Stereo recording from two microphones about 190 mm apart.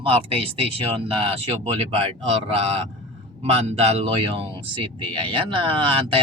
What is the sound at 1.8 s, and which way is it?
Speech, 30° right (ahead or behind).